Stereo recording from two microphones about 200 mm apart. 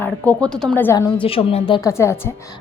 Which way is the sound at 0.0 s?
5° left (ahead or behind).